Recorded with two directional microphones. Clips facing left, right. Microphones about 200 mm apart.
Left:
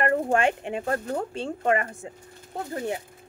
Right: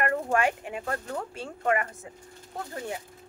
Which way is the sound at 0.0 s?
30° left (ahead or behind).